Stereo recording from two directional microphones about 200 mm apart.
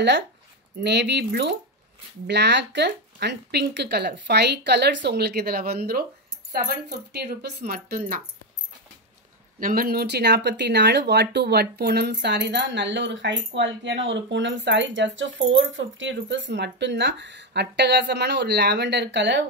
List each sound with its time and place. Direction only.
0.7 s speech: 55° right (ahead or behind)
7.1 s speech: 55° right (ahead or behind)
9.6 s speech: 45° right (ahead or behind); by 19.4 s 65° right (ahead or behind)